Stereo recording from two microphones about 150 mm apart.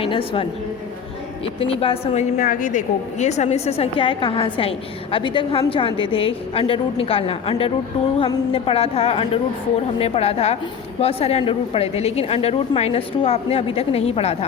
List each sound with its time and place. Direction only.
0.0 s a woman's voice: 35° left (ahead or behind)
1.5 s a woman's voice: 40° left (ahead or behind)
2.4 s a woman's voice: 60° left (ahead or behind); by 14.3 s 45° left (ahead or behind)